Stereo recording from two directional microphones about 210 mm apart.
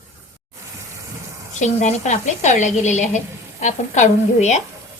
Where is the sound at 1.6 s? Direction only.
35° left (ahead or behind).